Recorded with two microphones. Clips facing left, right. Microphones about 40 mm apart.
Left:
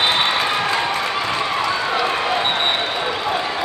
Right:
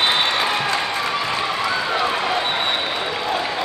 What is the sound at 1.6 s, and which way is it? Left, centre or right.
Run, centre.